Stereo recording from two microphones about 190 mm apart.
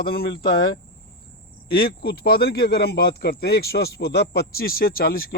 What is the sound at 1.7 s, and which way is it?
Speech, 50° left (ahead or behind).